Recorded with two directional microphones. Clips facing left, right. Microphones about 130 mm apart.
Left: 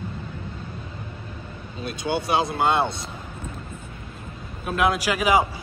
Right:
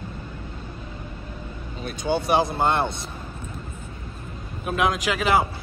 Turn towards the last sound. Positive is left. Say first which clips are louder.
# left 1 dB
turn(degrees=10)  # may be behind; listen again after turning